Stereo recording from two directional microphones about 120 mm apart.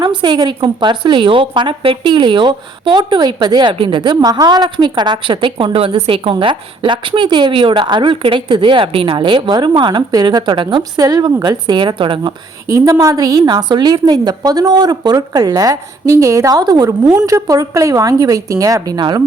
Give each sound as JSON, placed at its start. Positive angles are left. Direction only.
{"t": 0.0, "sound": "a woman's voice", "side_deg": -40}
{"t": 12.6, "sound": "a woman's voice", "side_deg": -30}